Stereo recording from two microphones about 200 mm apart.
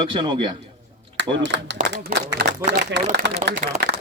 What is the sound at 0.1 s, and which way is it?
Speech, 25° right (ahead or behind).